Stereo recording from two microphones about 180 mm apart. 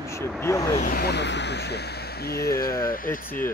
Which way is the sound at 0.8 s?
55° left (ahead or behind).